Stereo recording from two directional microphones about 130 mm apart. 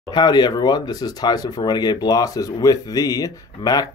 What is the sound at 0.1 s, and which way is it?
Speech, 35° left (ahead or behind).